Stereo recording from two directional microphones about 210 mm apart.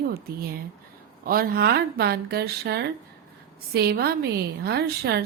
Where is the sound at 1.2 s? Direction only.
45° right (ahead or behind).